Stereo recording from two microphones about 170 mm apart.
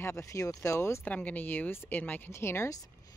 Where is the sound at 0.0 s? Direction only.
15° left (ahead or behind).